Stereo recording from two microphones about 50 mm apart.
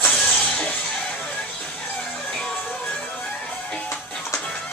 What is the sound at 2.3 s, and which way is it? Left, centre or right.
Music, centre.